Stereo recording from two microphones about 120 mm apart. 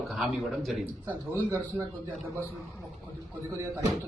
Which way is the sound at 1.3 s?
25° right (ahead or behind).